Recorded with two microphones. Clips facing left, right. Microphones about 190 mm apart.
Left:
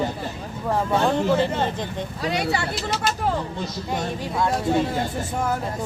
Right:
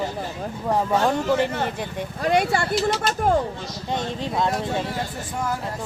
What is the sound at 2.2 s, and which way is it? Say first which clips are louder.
Speech: right 4 dB; 50° right (ahead or behind).